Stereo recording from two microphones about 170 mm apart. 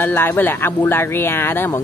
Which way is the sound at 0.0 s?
10° left (ahead or behind).